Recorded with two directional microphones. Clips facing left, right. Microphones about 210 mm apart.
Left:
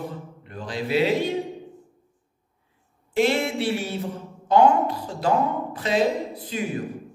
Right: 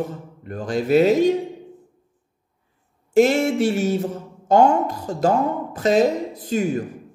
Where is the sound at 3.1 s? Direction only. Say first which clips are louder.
Right 6 dB; 45° right (ahead or behind).